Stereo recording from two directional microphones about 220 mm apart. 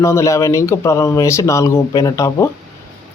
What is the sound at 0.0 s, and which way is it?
A man's voice, 15° left (ahead or behind).